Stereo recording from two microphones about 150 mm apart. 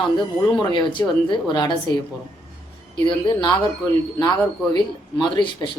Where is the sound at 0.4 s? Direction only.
30° left (ahead or behind).